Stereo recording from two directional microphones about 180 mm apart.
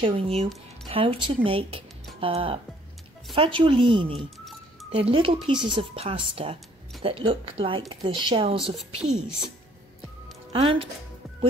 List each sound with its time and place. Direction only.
0.0 s speech: 30° right (ahead or behind)
10.5 s speech: 30° right (ahead or behind)